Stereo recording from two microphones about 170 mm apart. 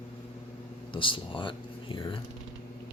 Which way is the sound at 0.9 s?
30° left (ahead or behind).